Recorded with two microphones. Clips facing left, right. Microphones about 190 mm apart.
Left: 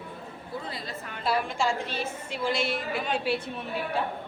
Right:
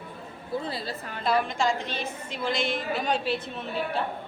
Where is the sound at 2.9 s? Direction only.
40° right (ahead or behind).